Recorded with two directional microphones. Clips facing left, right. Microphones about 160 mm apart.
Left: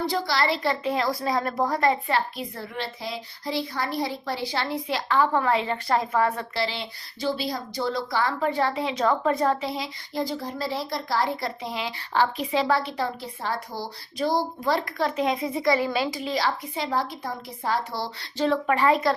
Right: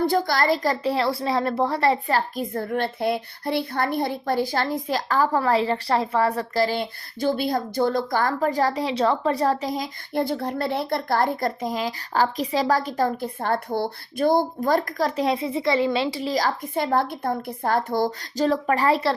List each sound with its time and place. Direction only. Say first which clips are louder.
0.0 s a woman's voice: right 4 dB; 50° right (ahead or behind)
10.2 s speech: right 4 dB; 60° right (ahead or behind); by 19.1 s 35° right (ahead or behind)